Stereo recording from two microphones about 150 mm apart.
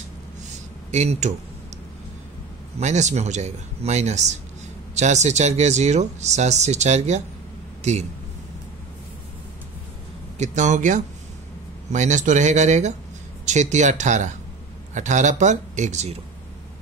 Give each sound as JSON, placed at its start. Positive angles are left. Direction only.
{"t": 0.9, "sound": "speech", "side_deg": -50}
{"t": 2.8, "sound": "a man's voice", "side_deg": -50}
{"t": 10.4, "sound": "speech", "side_deg": -55}